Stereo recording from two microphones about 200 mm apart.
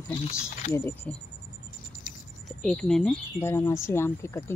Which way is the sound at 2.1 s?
45° left (ahead or behind).